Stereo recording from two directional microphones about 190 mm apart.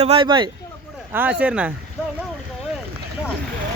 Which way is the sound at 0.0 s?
30° right (ahead or behind).